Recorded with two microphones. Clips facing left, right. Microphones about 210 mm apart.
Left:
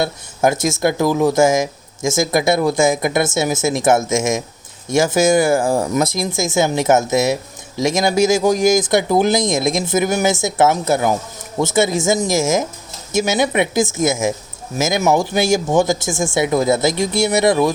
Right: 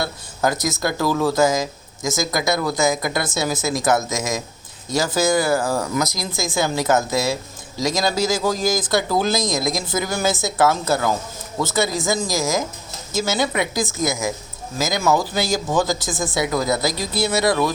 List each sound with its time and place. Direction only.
0.0 s speech: 25° left (ahead or behind)